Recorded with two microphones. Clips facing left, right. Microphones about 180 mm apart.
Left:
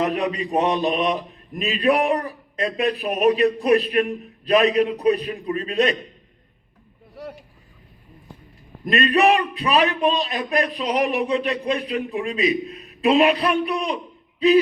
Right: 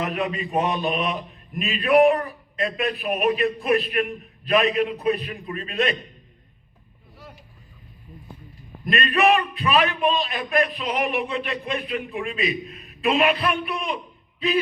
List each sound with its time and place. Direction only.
0.5 s a man's voice: 40° left (ahead or behind)
8.9 s a man's voice: 40° left (ahead or behind)